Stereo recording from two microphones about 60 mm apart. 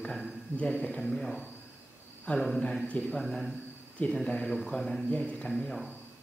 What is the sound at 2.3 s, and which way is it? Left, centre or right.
Speech, left.